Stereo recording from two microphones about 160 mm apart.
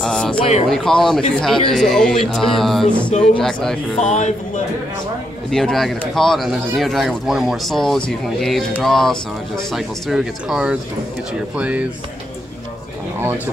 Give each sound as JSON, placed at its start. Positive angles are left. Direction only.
{"t": 0.0, "sound": "a sound", "side_deg": 5}
{"t": 0.7, "sound": "speech", "side_deg": 5}
{"t": 4.0, "sound": "speech", "side_deg": 45}
{"t": 5.5, "sound": "speech", "side_deg": 5}